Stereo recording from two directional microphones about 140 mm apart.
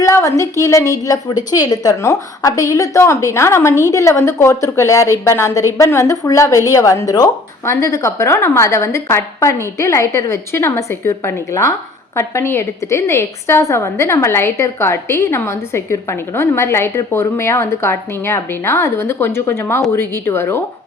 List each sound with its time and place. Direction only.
0.0 s a woman's voice: 20° left (ahead or behind)